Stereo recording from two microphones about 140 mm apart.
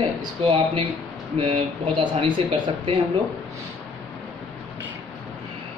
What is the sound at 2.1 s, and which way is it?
Speech, 35° right (ahead or behind).